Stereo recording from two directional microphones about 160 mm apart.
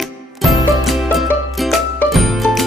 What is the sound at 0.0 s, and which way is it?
Music, centre (ahead or behind).